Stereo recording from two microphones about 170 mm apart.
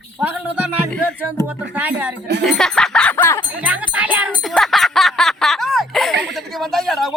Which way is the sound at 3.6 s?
10° right (ahead or behind).